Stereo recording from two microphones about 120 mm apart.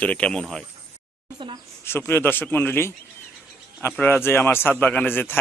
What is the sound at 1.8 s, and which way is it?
A man's voice, 20° left (ahead or behind).